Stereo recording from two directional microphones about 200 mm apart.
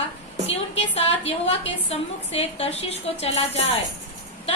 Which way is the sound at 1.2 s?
30° left (ahead or behind).